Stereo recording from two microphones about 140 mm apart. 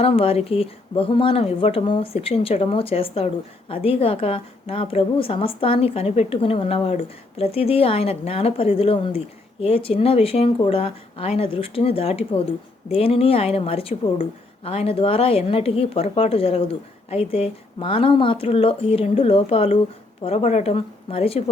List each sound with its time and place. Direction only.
0.0 s a woman's voice: 45° left (ahead or behind)